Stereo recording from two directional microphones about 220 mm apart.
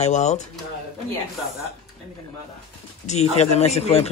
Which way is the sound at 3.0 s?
30° left (ahead or behind).